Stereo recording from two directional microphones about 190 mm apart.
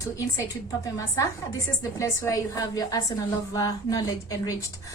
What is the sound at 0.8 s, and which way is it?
A woman's voice, 15° left (ahead or behind).